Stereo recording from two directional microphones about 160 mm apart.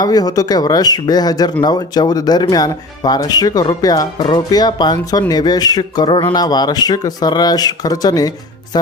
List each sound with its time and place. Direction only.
0.0 s speech: 25° left (ahead or behind)